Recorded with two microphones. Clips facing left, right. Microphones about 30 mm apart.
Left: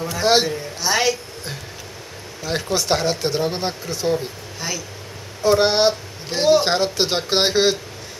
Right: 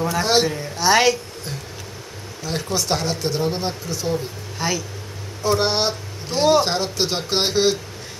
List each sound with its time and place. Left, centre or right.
0.2 s speech: centre
0.7 s a woman's voice: centre
2.4 s speech: centre
4.6 s speech: centre
5.4 s speech: centre